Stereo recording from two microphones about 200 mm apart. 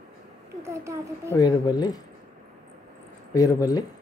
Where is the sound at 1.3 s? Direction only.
20° left (ahead or behind).